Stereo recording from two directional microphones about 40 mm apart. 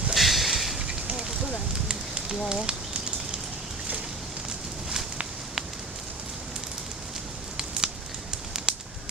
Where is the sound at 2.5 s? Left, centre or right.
Centre.